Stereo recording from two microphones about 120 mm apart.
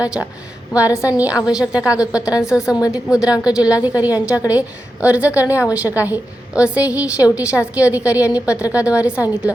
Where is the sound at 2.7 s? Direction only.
30° left (ahead or behind).